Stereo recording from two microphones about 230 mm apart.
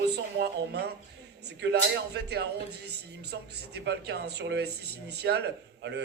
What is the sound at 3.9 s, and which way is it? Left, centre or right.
A man's voice, right.